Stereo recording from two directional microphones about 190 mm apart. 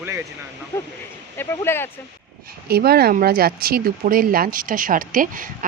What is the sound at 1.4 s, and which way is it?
Speech, 10° left (ahead or behind).